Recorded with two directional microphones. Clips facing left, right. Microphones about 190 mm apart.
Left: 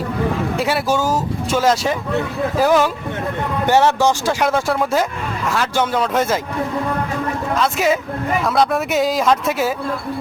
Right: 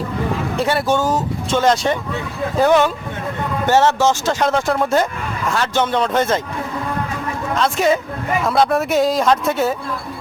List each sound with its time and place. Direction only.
0.5 s speech: 5° left (ahead or behind)
7.5 s speech: 5° left (ahead or behind)